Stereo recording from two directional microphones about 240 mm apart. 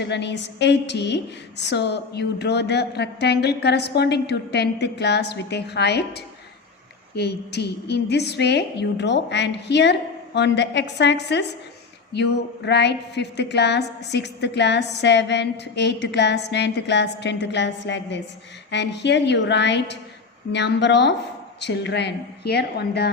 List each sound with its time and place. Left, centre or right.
0.0 s a woman's voice: left